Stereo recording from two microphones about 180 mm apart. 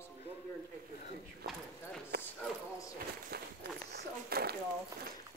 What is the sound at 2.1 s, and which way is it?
Clip-clop, 65° right (ahead or behind).